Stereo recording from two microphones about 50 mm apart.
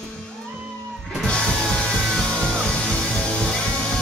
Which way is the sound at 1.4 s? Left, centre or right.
Centre.